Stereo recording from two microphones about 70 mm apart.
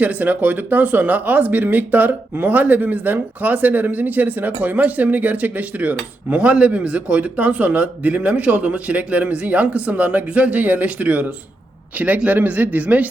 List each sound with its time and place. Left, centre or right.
0.0 s speech: right